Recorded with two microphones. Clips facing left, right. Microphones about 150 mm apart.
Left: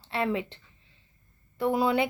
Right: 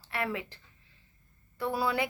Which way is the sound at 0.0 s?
25° left (ahead or behind).